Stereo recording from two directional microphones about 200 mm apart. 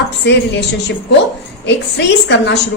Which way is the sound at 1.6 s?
60° left (ahead or behind).